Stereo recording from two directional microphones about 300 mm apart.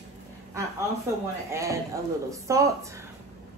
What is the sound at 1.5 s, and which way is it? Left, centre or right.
Speech, centre.